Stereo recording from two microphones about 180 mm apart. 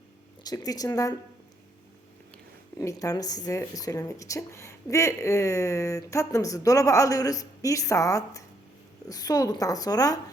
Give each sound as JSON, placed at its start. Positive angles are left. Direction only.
{"t": 0.4, "sound": "a woman's voice", "side_deg": 20}
{"t": 2.7, "sound": "a woman's voice", "side_deg": 20}